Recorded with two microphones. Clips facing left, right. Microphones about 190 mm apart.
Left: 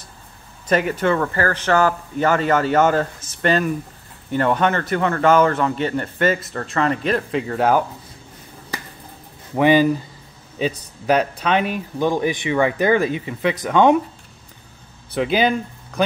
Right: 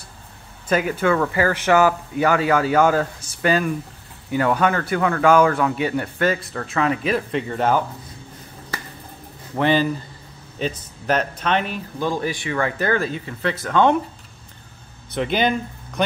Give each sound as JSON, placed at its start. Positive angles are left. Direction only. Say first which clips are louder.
{"t": 0.7, "sound": "speech", "louder": "left 1 dB", "side_deg": -5}
{"t": 9.6, "sound": "speech", "louder": "left 4 dB", "side_deg": 10}
{"t": 11.1, "sound": "speech", "louder": "left 3 dB", "side_deg": 10}
{"t": 15.1, "sound": "speech", "louder": "left 2 dB", "side_deg": 5}